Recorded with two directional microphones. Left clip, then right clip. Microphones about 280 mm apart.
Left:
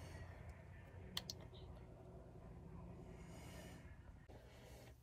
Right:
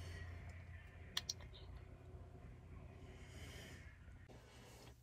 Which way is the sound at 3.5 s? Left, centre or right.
Centre.